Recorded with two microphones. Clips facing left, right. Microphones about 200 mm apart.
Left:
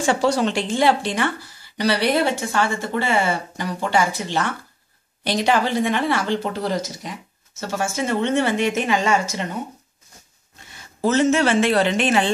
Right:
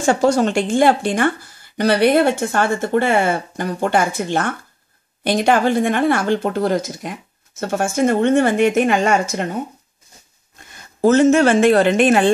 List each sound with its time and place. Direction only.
0.0 s speech: 45° right (ahead or behind)
10.6 s a woman's voice: 50° right (ahead or behind)